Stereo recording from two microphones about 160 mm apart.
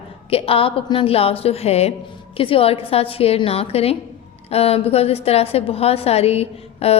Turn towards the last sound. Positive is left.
turn(degrees=40)  # may be behind; listen again after turning